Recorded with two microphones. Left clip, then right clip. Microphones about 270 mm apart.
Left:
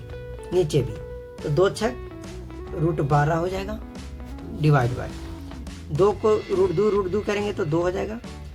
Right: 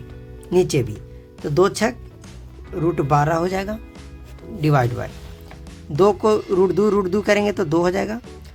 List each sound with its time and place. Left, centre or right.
0.5 s speech: right
6.0 s speech: right